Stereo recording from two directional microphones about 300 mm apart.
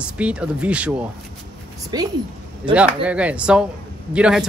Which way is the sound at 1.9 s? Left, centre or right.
Centre.